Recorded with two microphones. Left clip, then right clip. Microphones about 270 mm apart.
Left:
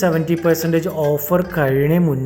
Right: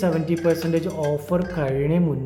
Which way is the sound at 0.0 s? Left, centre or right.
Centre.